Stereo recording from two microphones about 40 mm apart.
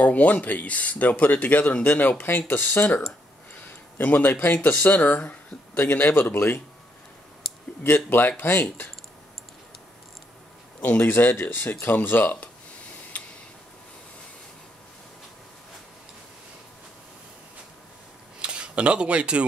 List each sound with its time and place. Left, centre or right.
0.0 s speech: left
1.9 s speech: left
4.0 s speech: left
7.4 s a sound: centre
7.8 s speech: left
11.0 s speech: left
13.1 s tick-tock: left
18.4 s speech: right